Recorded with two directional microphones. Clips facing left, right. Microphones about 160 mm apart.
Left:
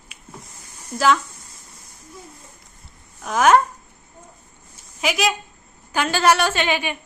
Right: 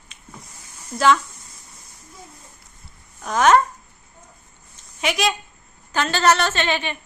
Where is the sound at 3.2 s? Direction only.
5° left (ahead or behind).